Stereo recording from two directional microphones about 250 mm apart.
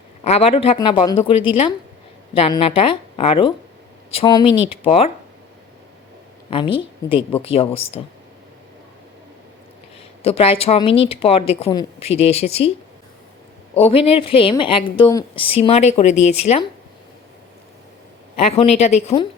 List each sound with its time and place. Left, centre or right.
0.3 s a woman's voice: left
2.3 s a woman's voice: left
6.5 s a woman's voice: centre
10.2 s a woman's voice: left
13.7 s a woman's voice: left
18.3 s a woman's voice: left